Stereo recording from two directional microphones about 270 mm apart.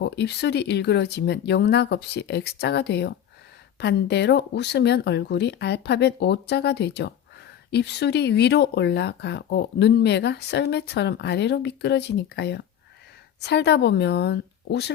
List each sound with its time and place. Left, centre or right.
0.0 s speech: left